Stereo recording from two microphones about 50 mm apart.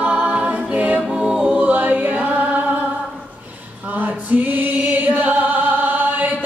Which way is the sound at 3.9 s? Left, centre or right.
Right.